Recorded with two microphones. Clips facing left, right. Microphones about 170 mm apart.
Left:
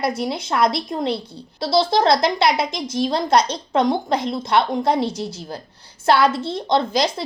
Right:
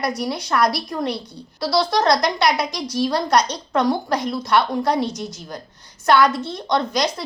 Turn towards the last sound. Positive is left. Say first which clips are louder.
# left 2 dB
turn(degrees=25)  # may be behind; listen again after turning